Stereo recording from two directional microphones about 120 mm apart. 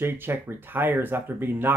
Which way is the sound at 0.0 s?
15° right (ahead or behind).